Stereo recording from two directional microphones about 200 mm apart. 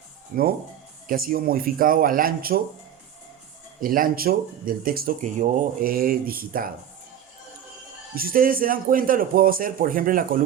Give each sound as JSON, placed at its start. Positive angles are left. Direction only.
{"t": 0.3, "sound": "speech", "side_deg": -45}
{"t": 3.8, "sound": "speech", "side_deg": -45}
{"t": 8.1, "sound": "speech", "side_deg": -45}